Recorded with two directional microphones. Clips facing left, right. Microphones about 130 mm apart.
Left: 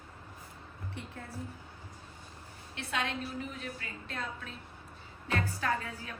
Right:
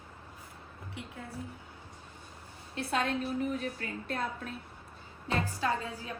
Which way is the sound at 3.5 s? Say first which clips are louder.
Right 7 dB; 40° right (ahead or behind).